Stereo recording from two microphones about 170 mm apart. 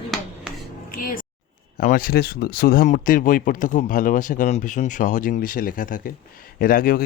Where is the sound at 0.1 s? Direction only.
Centre (ahead or behind).